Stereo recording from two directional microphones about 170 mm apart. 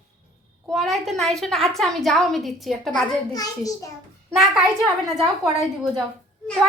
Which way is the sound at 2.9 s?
20° left (ahead or behind).